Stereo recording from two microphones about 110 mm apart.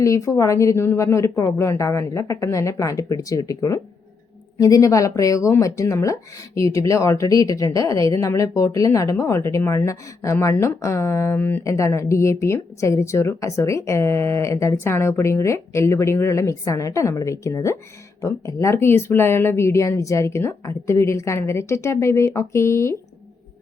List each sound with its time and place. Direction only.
0.0 s speech: 30° left (ahead or behind)